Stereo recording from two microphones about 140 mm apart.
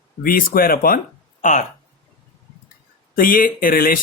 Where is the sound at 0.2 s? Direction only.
90° left.